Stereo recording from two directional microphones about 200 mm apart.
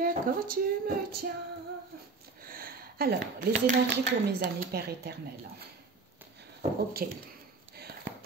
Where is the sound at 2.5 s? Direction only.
45° right (ahead or behind).